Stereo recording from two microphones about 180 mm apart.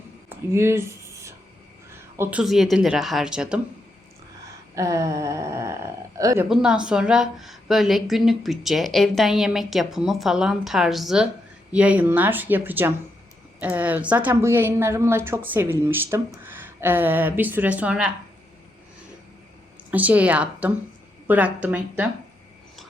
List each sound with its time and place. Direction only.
0.3 s a sound: 15° right (ahead or behind)
2.4 s a woman's voice: centre (ahead or behind)
4.7 s a woman's voice: 15° right (ahead or behind)
6.5 s a woman's voice: 5° right (ahead or behind)
19.9 s a woman's voice: 10° right (ahead or behind)